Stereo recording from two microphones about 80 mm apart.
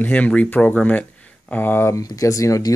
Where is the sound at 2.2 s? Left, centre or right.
Left.